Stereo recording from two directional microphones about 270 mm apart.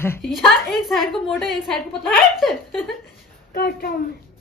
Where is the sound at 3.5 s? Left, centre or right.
Left.